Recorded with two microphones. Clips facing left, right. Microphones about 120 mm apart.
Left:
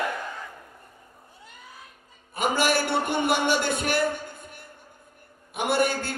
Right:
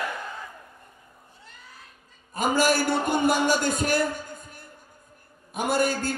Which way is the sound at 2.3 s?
40° right (ahead or behind).